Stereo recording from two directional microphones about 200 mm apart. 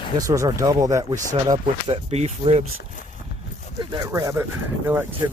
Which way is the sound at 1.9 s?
30° right (ahead or behind).